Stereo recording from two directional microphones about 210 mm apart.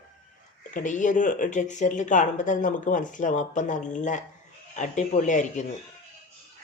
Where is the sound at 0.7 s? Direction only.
35° left (ahead or behind).